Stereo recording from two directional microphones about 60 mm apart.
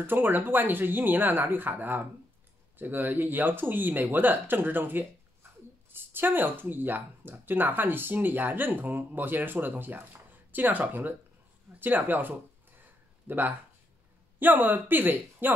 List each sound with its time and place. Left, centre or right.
0.0 s speech: right